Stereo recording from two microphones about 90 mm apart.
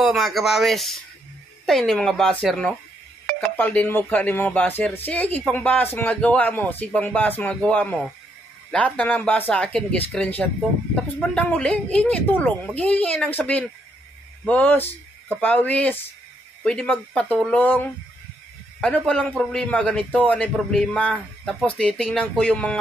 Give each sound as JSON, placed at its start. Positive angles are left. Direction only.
{"t": 0.0, "sound": "speech", "side_deg": -5}
{"t": 3.3, "sound": "speech", "side_deg": 20}
{"t": 19.0, "sound": "speech", "side_deg": 10}